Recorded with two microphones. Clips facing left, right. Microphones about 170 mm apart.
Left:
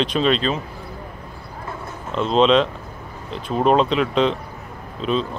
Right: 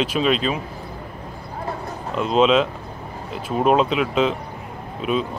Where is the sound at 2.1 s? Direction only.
5° right (ahead or behind).